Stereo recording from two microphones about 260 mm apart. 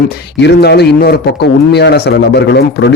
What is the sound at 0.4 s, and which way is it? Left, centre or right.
Speech, left.